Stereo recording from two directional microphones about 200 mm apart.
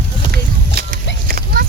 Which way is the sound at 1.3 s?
45° right (ahead or behind).